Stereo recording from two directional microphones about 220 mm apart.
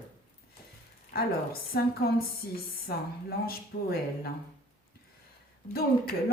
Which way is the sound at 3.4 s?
45° left (ahead or behind).